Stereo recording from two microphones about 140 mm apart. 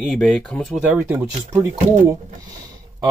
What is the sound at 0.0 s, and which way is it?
Speech, centre (ahead or behind).